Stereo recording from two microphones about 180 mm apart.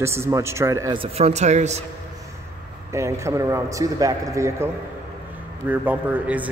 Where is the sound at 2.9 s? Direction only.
15° right (ahead or behind).